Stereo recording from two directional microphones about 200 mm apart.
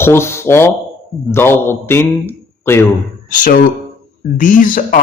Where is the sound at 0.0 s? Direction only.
10° left (ahead or behind).